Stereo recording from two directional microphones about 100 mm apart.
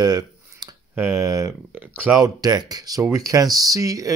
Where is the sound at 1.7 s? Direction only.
15° right (ahead or behind).